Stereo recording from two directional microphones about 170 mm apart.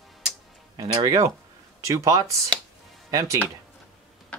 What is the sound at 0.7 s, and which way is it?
Speech, 20° right (ahead or behind).